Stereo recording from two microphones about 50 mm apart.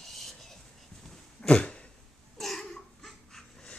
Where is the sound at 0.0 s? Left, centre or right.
Centre.